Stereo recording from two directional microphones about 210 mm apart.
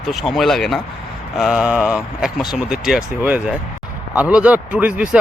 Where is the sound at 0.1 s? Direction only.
Centre (ahead or behind).